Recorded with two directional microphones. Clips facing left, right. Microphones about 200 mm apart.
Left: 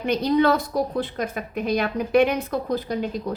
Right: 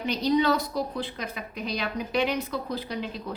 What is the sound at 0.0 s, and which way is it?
A woman's voice, 55° left (ahead or behind).